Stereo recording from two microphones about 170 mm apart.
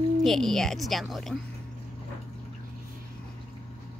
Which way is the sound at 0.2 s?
Centre (ahead or behind).